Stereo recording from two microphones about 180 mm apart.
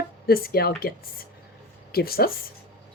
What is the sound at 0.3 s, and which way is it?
Speech, 55° left (ahead or behind).